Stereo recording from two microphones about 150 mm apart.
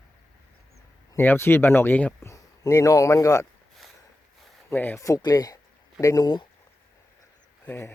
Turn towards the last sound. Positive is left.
turn(degrees=15)  # may be behind; listen again after turning